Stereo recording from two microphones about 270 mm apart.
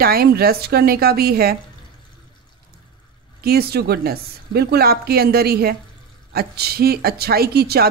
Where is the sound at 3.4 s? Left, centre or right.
Right.